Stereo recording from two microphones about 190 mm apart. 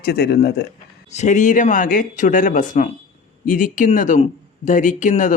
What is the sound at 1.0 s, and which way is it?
Speech, 35° left (ahead or behind).